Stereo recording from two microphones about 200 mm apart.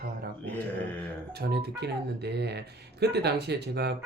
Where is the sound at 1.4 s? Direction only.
55° right (ahead or behind).